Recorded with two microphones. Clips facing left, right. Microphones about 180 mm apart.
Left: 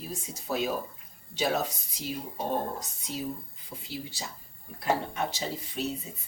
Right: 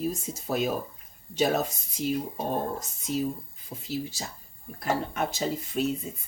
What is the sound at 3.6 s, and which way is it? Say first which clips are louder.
Speech: right 6 dB; 45° right (ahead or behind).